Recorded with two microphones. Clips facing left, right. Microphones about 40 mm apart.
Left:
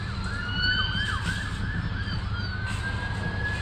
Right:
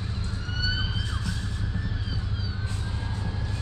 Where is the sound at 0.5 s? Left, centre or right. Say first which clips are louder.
Left 5 dB; left.